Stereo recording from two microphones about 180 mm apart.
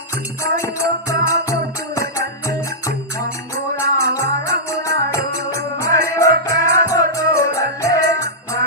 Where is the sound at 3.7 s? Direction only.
15° left (ahead or behind).